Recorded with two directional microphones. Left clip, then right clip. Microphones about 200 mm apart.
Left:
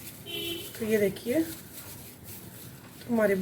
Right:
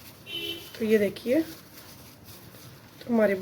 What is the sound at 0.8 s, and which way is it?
Speech, 50° right (ahead or behind).